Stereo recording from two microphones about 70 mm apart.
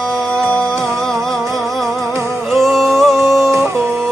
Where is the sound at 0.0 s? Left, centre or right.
Centre.